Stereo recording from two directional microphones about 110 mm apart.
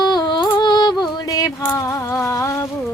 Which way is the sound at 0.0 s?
40° left (ahead or behind).